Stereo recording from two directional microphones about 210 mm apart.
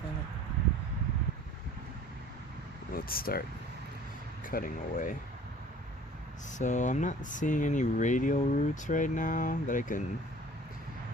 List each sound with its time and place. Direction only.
2.9 s speech: 45° left (ahead or behind)
4.4 s speech: 40° left (ahead or behind)
6.6 s speech: 35° left (ahead or behind)